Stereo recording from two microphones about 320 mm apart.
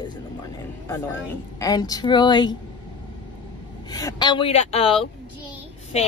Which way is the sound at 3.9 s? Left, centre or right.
Centre.